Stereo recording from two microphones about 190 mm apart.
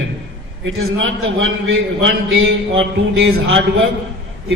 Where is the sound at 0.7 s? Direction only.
90° right.